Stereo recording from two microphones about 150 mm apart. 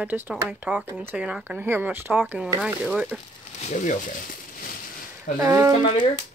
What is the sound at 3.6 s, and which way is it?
Speech, 55° left (ahead or behind).